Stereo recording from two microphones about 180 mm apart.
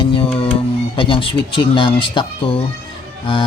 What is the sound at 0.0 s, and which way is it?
Music, 30° left (ahead or behind).